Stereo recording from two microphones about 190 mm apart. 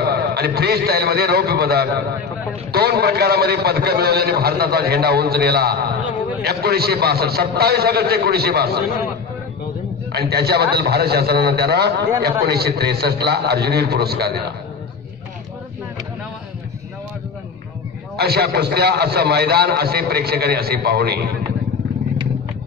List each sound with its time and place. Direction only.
0.0 s a man's voice: 55° right (ahead or behind)
10.1 s a man's voice: 55° right (ahead or behind)
18.1 s a man's voice: 55° right (ahead or behind)